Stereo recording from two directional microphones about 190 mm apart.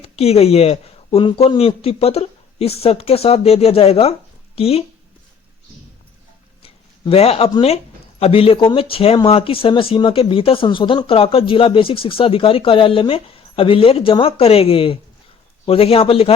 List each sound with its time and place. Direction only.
0.0 s speech: 35° left (ahead or behind)
6.6 s a sound: 30° left (ahead or behind)
7.5 s speech: 30° left (ahead or behind)